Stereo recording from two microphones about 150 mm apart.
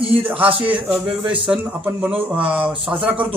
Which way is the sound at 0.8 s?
10° right (ahead or behind).